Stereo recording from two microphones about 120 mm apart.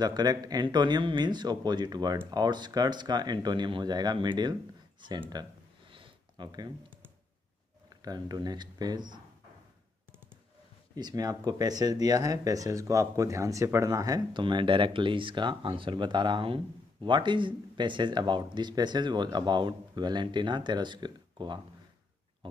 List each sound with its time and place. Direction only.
0.0 s speech: 35° right (ahead or behind)
5.3 s a sound: 40° right (ahead or behind)
8.0 s speech: 35° right (ahead or behind)
11.0 s speech: 35° right (ahead or behind)
14.4 s speech: 45° right (ahead or behind)